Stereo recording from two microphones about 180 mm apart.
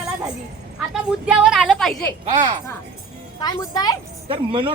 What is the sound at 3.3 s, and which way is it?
Speech, 20° left (ahead or behind).